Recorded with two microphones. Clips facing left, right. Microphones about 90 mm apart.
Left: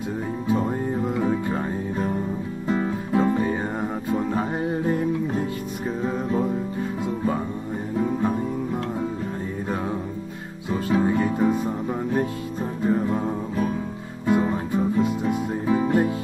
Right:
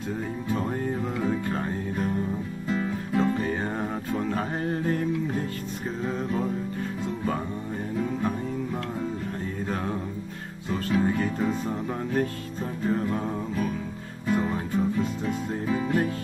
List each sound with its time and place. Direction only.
0.5 s music: 15° left (ahead or behind)
2.7 s music: 30° left (ahead or behind)
6.0 s music: 15° left (ahead or behind)
8.0 s music: 25° left (ahead or behind)
10.7 s music: 15° left (ahead or behind)